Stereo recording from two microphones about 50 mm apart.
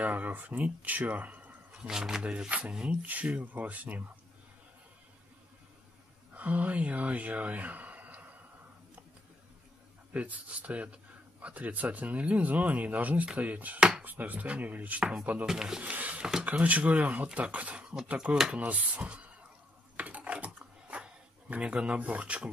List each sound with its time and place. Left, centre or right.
0.0 s speech: right
1.7 s speech: centre
2.3 s speech: right
6.3 s speech: right
10.1 s speech: right
13.7 s chopping: centre
14.0 s speech: right
15.4 s speech: centre
15.8 s a sound: right
16.4 s speech: right
18.6 s speech: right
20.0 s a sound: right